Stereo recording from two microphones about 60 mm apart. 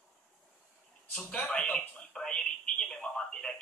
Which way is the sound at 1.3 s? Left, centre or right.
Left.